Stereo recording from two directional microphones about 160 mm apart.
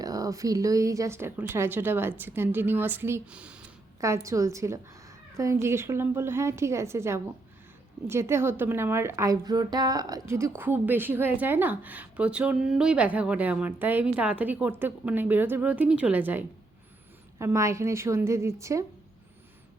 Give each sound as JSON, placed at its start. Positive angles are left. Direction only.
{"t": 0.0, "sound": "a woman's voice", "side_deg": -20}
{"t": 4.0, "sound": "a woman's voice", "side_deg": -20}